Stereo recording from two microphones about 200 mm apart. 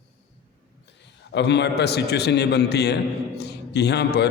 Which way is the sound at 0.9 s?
60° left (ahead or behind).